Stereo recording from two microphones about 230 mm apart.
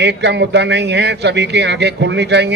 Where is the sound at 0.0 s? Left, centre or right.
Right.